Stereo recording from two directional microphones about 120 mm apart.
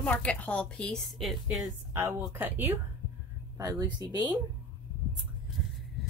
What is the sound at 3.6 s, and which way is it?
Speech, 35° right (ahead or behind).